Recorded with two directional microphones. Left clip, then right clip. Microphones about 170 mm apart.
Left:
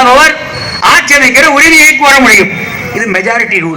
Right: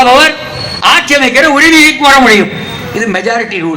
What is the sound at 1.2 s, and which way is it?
A man's voice, 25° right (ahead or behind).